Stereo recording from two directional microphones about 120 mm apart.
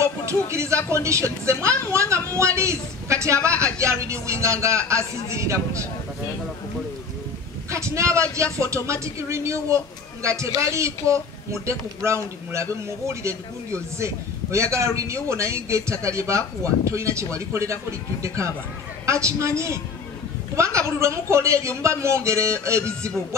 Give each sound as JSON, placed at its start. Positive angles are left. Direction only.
{"t": 0.0, "sound": "a man's voice", "side_deg": -25}
{"t": 2.2, "sound": "a sound", "side_deg": -25}
{"t": 3.6, "sound": "a man's voice", "side_deg": -25}
{"t": 7.7, "sound": "a man's voice", "side_deg": -25}